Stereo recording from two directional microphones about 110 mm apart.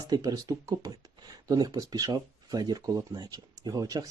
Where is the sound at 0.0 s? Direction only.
35° right (ahead or behind).